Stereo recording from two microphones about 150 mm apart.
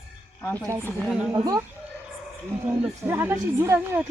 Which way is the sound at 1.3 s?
25° right (ahead or behind).